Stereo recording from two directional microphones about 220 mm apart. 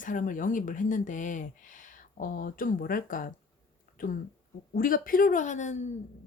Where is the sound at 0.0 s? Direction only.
35° left (ahead or behind).